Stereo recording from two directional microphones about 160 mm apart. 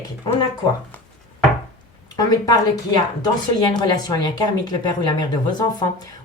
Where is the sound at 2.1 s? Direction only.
25° left (ahead or behind).